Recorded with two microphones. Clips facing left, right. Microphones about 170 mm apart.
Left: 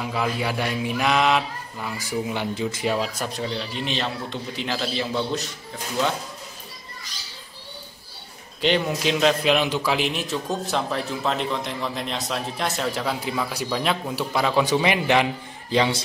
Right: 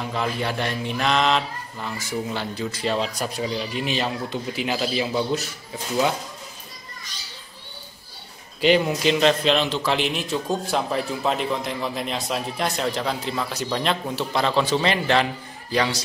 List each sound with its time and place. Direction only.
0.0 s a man's voice: 5° left (ahead or behind)
8.5 s a man's voice: 5° right (ahead or behind); by 16.0 s 20° left (ahead or behind)